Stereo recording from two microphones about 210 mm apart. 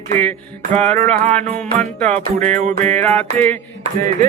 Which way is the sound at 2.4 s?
35° right (ahead or behind).